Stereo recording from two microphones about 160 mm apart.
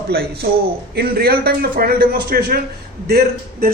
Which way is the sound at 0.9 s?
75° right (ahead or behind).